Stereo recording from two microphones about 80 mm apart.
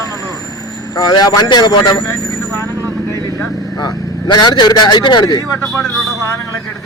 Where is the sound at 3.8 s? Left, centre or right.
Left.